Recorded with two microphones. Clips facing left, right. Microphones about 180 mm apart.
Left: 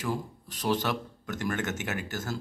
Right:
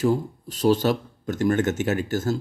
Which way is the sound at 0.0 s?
30° right (ahead or behind).